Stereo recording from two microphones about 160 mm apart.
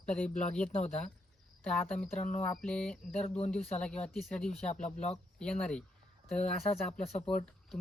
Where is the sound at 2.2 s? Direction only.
50° left (ahead or behind).